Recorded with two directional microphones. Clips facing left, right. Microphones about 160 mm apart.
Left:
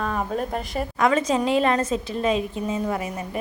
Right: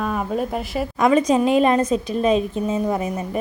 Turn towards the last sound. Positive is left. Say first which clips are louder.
# right 4 dB
turn(degrees=-20)  # may be behind; listen again after turning